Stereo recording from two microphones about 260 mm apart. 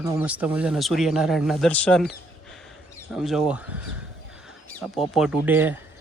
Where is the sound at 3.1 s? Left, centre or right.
Centre.